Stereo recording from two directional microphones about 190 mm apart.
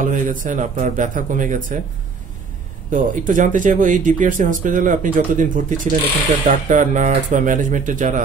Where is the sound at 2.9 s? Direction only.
45° right (ahead or behind).